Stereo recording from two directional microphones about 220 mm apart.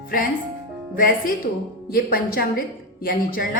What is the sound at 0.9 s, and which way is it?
A woman's voice, 40° left (ahead or behind).